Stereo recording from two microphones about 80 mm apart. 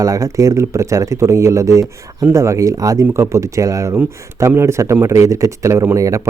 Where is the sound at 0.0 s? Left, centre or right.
Right.